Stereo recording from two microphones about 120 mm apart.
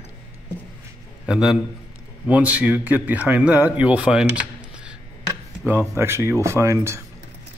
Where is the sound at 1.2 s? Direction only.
5° right (ahead or behind).